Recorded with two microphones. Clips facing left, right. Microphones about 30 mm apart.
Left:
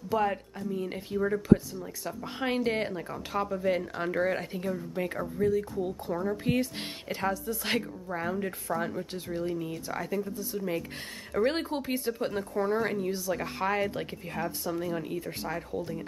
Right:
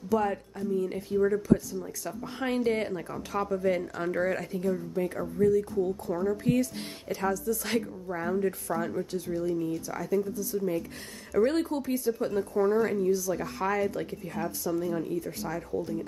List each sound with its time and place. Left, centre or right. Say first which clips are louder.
0.1 s speech: right 1 dB; left
1.2 s speech: left 1 dB; centre
2.9 s speech: right 1 dB; centre
4.5 s speech: right 3 dB; left
8.6 s speech: even; centre
9.1 s speech: right 3 dB; left
11.3 s speech: right 2 dB; left
11.7 s speech: right 2 dB; left